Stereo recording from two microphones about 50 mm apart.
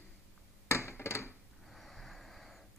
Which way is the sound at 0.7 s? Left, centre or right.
Left.